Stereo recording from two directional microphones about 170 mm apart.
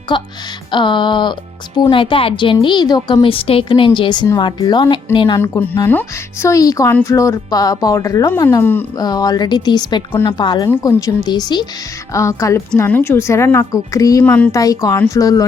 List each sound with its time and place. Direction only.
0.1 s a woman's voice: 30° left (ahead or behind)
5.4 s a woman's voice: 10° left (ahead or behind)
9.0 s a woman's voice: 25° left (ahead or behind)
14.3 s a woman's voice: 10° left (ahead or behind)
14.5 s a woman's voice: 20° left (ahead or behind)